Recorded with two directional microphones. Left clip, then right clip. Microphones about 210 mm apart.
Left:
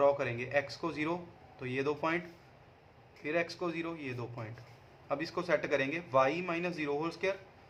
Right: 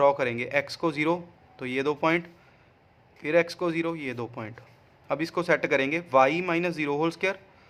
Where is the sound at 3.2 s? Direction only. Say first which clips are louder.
Right 10 dB; 55° right (ahead or behind).